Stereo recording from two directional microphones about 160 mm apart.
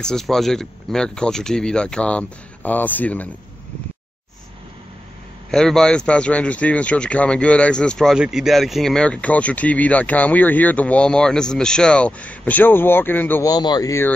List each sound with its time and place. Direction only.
0.0 s speech: 5° left (ahead or behind)
5.5 s speech: centre (ahead or behind)
13.5 s speech: 25° left (ahead or behind)